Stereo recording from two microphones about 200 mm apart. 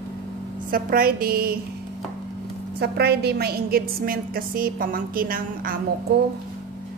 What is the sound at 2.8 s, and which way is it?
A woman's voice, 55° right (ahead or behind).